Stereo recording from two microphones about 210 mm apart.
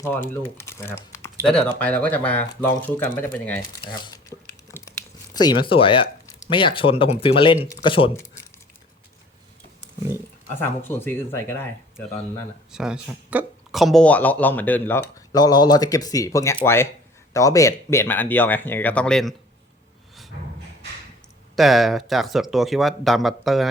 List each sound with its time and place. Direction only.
0.0 s speech: 10° left (ahead or behind)
3.8 s speech: 20° left (ahead or behind)
10.6 s speech: 10° left (ahead or behind)
12.7 s speech: 5° right (ahead or behind)
21.5 s speech: centre (ahead or behind)